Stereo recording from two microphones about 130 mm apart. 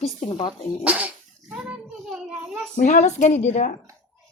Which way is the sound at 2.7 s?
70° left (ahead or behind).